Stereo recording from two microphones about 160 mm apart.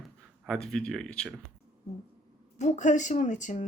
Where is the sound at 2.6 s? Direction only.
50° left (ahead or behind).